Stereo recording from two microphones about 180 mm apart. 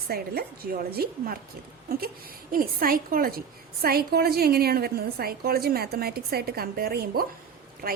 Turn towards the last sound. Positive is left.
turn(degrees=-55)  # may be behind; listen again after turning